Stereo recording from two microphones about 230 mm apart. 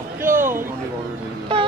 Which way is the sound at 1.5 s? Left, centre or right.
Right.